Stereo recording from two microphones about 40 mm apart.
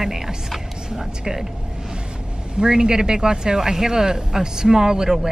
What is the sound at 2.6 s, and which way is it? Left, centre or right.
Speech, centre.